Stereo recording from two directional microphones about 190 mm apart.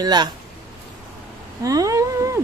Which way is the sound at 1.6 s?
20° right (ahead or behind).